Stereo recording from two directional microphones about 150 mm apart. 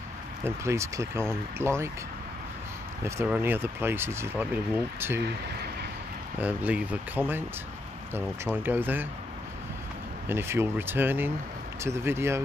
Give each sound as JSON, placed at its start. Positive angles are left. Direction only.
{"t": 0.4, "sound": "speech", "side_deg": -20}
{"t": 3.3, "sound": "speech", "side_deg": -15}
{"t": 6.4, "sound": "speech", "side_deg": -10}
{"t": 10.2, "sound": "speech", "side_deg": -15}